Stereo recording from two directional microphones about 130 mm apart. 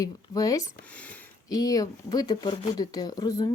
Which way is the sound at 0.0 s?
25° left (ahead or behind).